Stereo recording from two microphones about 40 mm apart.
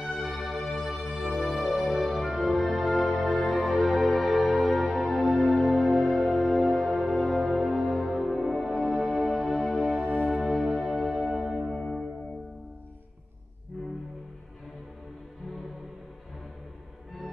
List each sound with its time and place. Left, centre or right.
0.0 s music: centre
9.5 s music: centre
9.8 s music: centre
10.2 s music: centre
11.7 s music: centre